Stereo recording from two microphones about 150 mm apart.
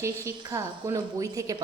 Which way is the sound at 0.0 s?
20° right (ahead or behind).